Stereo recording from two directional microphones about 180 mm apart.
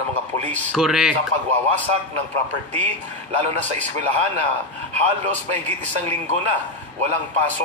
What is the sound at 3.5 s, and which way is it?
A man's voice, 40° right (ahead or behind).